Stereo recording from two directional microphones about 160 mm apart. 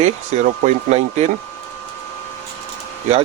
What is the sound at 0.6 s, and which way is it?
Speech, 45° right (ahead or behind).